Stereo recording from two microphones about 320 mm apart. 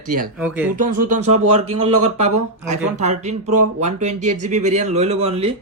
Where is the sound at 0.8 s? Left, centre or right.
Right.